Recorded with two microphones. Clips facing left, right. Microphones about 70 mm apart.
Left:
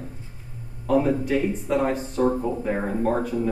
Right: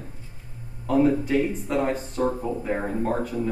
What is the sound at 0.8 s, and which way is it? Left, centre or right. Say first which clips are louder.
Speech: even; centre.